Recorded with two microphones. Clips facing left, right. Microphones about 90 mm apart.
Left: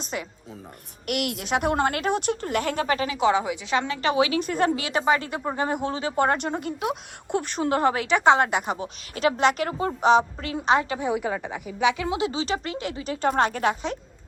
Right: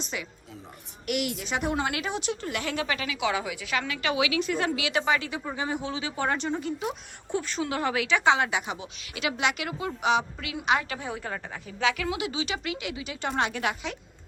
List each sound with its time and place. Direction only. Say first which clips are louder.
0.0 s speech: left 3 dB; 45° left (ahead or behind)
1.0 s a woman's voice: left 2 dB; 60° left (ahead or behind); by 14.0 s 35° left (ahead or behind)